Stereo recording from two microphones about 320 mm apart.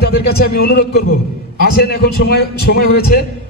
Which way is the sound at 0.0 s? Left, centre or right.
Left.